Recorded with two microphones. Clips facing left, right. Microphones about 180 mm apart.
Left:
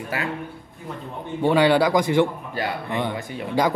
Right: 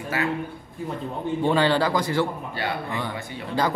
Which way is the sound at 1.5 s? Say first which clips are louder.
Left 5 dB; 15° left (ahead or behind).